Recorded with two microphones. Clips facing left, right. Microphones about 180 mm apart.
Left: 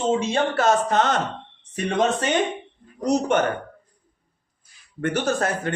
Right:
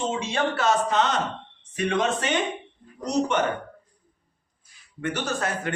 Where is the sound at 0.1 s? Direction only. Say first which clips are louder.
Left 5 dB; 40° left (ahead or behind).